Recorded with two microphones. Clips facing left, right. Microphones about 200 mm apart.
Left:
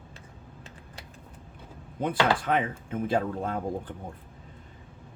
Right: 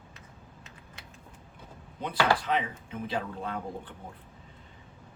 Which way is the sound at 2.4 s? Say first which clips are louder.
Left 3 dB; 50° left (ahead or behind).